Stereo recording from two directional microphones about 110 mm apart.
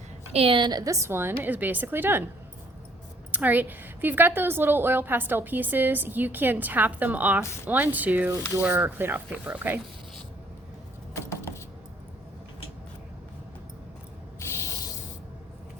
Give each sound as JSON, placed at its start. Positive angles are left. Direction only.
{"t": 0.3, "sound": "a woman's voice", "side_deg": -55}
{"t": 3.3, "sound": "a woman's voice", "side_deg": -15}
{"t": 11.1, "sound": "vehicle", "side_deg": 25}